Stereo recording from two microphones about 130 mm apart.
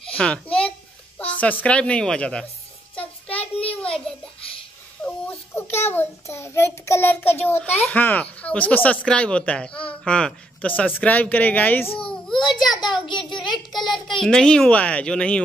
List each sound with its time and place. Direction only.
0.1 s a sound: 10° left (ahead or behind)
3.3 s child singing: 50° left (ahead or behind)
5.9 s child singing: 20° left (ahead or behind)
7.9 s speech: 10° left (ahead or behind)
12.1 s child singing: centre (ahead or behind)
13.4 s a child's voice: centre (ahead or behind)